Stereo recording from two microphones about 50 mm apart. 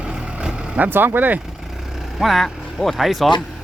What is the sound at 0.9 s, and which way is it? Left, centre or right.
Speech, right.